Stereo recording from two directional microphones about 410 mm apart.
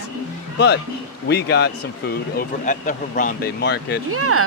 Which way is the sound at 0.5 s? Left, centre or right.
Left.